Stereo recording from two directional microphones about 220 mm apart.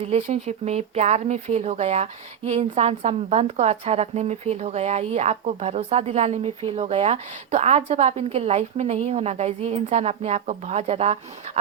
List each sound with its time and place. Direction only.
0.0 s a woman's voice: 30° right (ahead or behind)